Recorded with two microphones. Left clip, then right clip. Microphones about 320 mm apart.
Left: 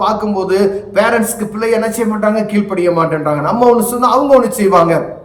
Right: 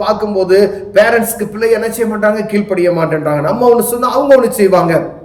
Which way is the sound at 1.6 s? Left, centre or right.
Centre.